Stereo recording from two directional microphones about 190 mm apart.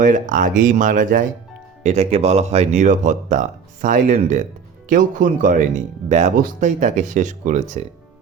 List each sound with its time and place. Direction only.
0.0 s speech: 45° right (ahead or behind)